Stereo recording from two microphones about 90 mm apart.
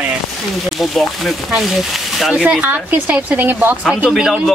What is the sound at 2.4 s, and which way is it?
A woman's voice, 15° right (ahead or behind).